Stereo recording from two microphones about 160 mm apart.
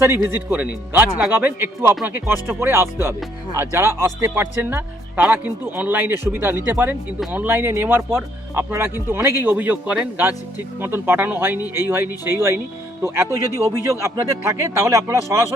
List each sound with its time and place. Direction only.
0.0 s speech: 15° right (ahead or behind)
14.7 s speech: 20° right (ahead or behind)